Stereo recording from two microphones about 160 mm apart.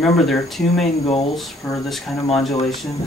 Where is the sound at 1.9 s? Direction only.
Centre (ahead or behind).